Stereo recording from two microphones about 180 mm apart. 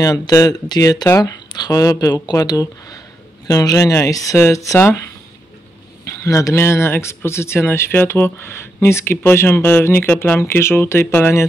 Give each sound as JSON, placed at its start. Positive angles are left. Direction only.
{"t": 0.0, "sound": "speech", "side_deg": 20}
{"t": 6.0, "sound": "speech", "side_deg": 15}